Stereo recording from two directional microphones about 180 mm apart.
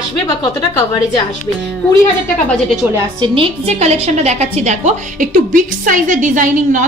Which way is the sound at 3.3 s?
35° right (ahead or behind).